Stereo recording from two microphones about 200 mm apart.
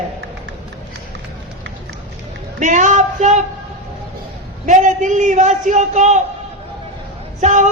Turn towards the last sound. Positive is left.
turn(degrees=-40)  # may be behind; listen again after turning